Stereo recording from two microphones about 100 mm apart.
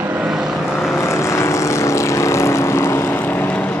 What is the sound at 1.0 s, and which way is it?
Vehicle, 30° left (ahead or behind).